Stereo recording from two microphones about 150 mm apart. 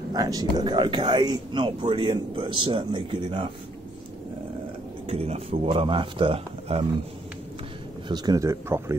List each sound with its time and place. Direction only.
0.1 s a man's voice: 25° right (ahead or behind)
5.0 s a man's voice: 40° right (ahead or behind)
8.1 s speech: 25° right (ahead or behind)